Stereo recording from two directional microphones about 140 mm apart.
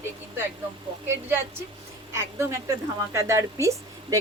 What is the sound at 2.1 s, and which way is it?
A woman's voice, 20° right (ahead or behind).